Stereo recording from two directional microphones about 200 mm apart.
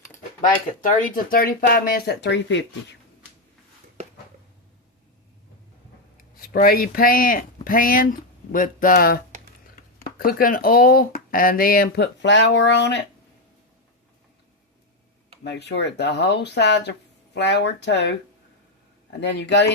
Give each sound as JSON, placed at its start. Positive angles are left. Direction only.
{"t": 0.8, "sound": "speech", "side_deg": 40}
{"t": 6.1, "sound": "speech", "side_deg": 45}
{"t": 15.4, "sound": "speech", "side_deg": 60}
{"t": 19.2, "sound": "speech", "side_deg": 60}